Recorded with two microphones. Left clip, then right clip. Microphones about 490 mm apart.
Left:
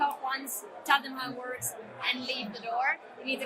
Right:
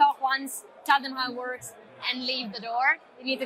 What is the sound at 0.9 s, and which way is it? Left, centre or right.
Speech, right.